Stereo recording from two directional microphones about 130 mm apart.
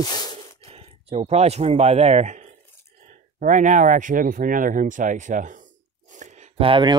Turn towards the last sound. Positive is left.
turn(degrees=-40)  # may be behind; listen again after turning